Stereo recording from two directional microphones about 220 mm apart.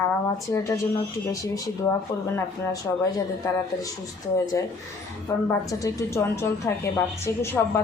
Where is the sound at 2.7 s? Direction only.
15° left (ahead or behind).